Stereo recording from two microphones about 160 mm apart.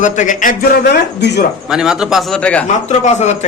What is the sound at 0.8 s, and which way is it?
Speech, 90° left.